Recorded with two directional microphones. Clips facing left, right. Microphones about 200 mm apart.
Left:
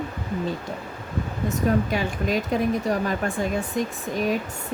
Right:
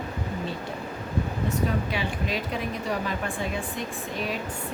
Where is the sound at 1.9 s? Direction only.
45° left (ahead or behind).